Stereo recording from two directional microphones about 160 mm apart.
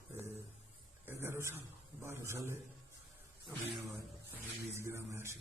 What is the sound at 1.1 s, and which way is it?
A man's voice, 15° right (ahead or behind).